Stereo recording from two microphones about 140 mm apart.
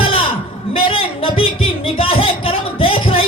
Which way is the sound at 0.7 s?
40° left (ahead or behind).